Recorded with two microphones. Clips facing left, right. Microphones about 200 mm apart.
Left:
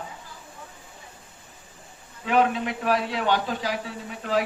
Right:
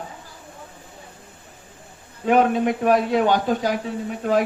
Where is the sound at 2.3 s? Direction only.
50° right (ahead or behind).